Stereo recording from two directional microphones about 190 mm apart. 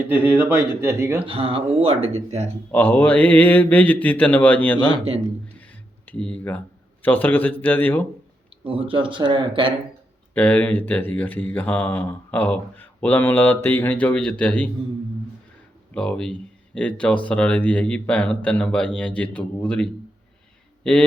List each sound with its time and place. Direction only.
0.1 s speech: 10° right (ahead or behind)
1.2 s speech: 30° right (ahead or behind)
2.7 s speech: 10° left (ahead or behind)
6.1 s speech: 5° left (ahead or behind)
8.6 s speech: 30° right (ahead or behind)
10.3 s speech: 10° left (ahead or behind)
16.0 s a man's voice: 5° left (ahead or behind)